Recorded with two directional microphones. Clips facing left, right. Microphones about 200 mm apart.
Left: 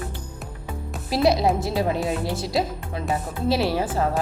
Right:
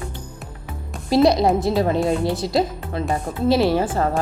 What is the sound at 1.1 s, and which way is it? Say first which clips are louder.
A woman's voice: right 4 dB; 5° left (ahead or behind).